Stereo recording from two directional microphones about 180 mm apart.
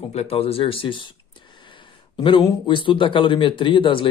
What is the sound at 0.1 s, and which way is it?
Speech, 35° left (ahead or behind).